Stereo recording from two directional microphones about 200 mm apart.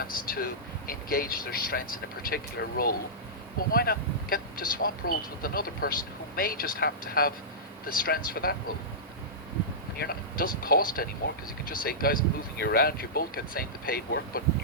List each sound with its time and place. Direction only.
0.0 s speech: 45° left (ahead or behind)
10.0 s speech: 45° left (ahead or behind)